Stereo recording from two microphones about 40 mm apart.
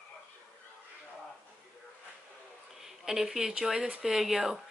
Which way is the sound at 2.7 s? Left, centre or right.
Centre.